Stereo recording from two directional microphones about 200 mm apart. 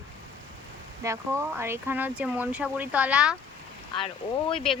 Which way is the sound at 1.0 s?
15° right (ahead or behind).